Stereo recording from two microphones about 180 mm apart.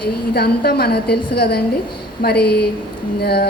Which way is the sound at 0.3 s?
60° left (ahead or behind).